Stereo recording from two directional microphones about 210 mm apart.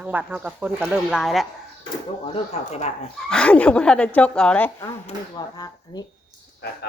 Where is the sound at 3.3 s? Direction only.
5° left (ahead or behind).